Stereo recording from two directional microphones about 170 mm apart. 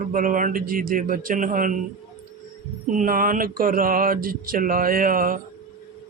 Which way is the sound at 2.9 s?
55° right (ahead or behind).